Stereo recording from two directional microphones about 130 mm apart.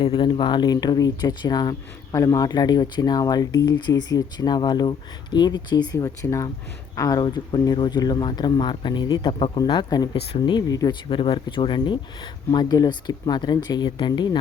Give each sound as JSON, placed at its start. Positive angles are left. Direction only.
{"t": 0.0, "sound": "speech", "side_deg": 35}